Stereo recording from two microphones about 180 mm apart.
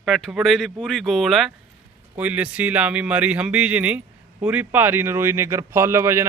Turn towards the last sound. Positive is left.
turn(degrees=-15)  # may be behind; listen again after turning